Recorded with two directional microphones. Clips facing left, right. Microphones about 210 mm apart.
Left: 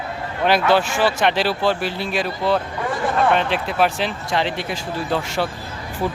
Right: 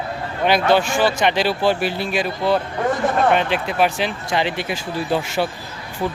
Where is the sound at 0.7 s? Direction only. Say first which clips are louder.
Right 1 dB; 5° left (ahead or behind).